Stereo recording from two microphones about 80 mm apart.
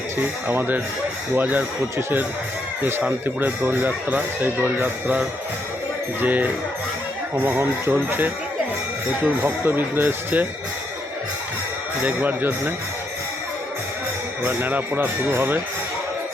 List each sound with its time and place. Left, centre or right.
0.2 s speech: right
3.2 s speech: right
12.0 s speech: right
14.4 s speech: right